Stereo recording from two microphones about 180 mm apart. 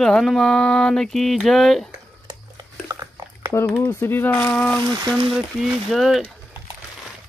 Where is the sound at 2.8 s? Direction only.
15° right (ahead or behind).